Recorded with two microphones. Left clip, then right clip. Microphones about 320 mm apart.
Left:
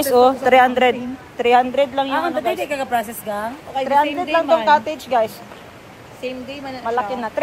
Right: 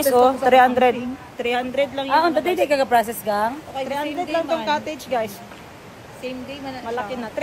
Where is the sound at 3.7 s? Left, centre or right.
Left.